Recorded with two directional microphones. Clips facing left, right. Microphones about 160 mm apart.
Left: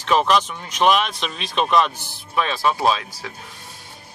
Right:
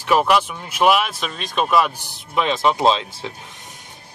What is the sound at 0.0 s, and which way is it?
Speech, 10° right (ahead or behind).